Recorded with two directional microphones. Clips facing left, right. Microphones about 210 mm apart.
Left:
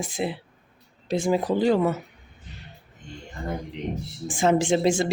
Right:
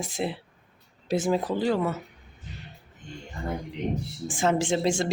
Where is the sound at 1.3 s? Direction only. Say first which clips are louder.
Left 5 dB; 15° left (ahead or behind).